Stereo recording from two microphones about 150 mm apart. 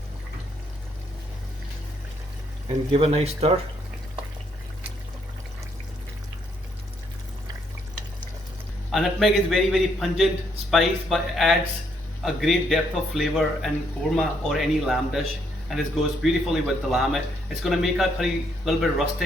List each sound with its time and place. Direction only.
2.9 s speech: 40° right (ahead or behind)
8.9 s speech: centre (ahead or behind)